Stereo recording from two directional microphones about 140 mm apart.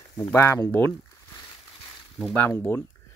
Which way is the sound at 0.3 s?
20° left (ahead or behind).